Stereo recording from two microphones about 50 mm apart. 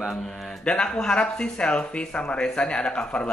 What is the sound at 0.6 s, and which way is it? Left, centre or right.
Speech, left.